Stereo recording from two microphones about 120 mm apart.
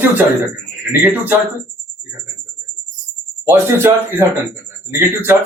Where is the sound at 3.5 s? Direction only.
20° right (ahead or behind).